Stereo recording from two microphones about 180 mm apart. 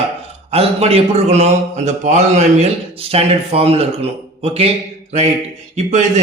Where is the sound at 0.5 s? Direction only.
35° right (ahead or behind).